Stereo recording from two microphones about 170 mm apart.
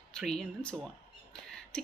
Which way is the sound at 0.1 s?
Centre (ahead or behind).